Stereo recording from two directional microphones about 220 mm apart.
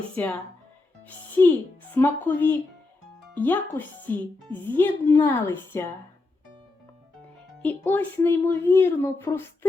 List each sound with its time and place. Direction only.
0.2 s speech: 10° left (ahead or behind)
1.4 s speech: 10° left (ahead or behind)
7.6 s speech: 5° left (ahead or behind)